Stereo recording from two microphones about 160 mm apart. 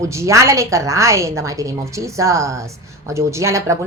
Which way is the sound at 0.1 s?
20° right (ahead or behind).